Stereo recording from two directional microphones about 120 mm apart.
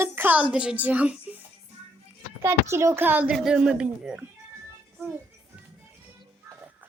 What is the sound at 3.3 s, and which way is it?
Child singing, 5° right (ahead or behind).